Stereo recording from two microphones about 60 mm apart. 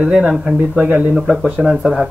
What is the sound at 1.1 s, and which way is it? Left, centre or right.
Speech, centre.